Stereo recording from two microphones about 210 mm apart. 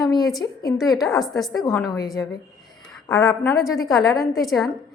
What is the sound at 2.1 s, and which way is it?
A woman's voice, 15° left (ahead or behind).